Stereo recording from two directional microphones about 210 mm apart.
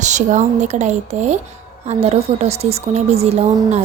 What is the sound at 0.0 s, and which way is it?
A woman's voice, 35° right (ahead or behind).